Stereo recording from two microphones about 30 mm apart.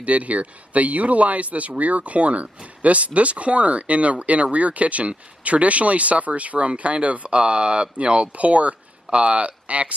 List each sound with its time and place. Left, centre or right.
0.0 s speech: right
8.4 s speech: right